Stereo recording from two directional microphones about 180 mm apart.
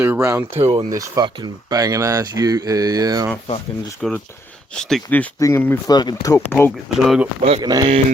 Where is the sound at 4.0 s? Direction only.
5° left (ahead or behind).